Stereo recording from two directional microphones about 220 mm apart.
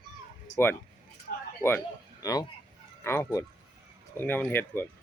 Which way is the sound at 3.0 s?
10° left (ahead or behind).